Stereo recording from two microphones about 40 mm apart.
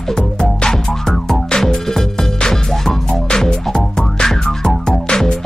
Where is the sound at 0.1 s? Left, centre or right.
Centre.